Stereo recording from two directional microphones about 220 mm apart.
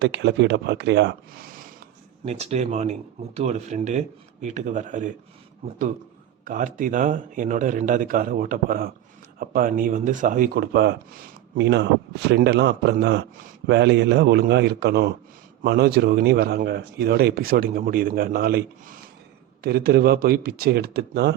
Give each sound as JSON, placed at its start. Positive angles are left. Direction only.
{"t": 0.0, "sound": "speech", "side_deg": -50}
{"t": 2.2, "sound": "speech", "side_deg": -30}
{"t": 6.4, "sound": "speech", "side_deg": -35}